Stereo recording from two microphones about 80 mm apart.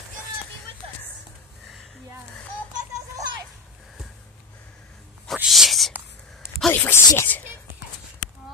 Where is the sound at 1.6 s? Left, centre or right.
Centre.